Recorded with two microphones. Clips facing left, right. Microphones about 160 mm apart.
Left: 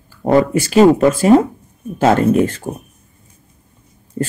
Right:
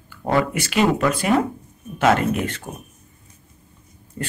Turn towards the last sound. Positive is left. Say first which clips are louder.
# left 9 dB
turn(degrees=35)  # may be behind; listen again after turning